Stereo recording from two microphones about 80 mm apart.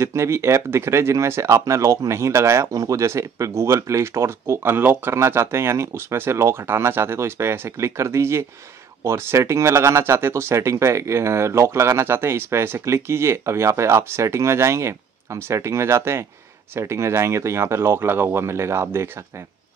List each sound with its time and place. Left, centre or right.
0.0 s speech: right